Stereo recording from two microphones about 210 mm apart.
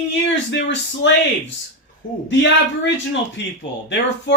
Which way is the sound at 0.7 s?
55° left (ahead or behind).